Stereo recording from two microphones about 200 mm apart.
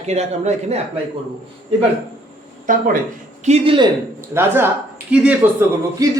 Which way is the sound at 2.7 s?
40° right (ahead or behind).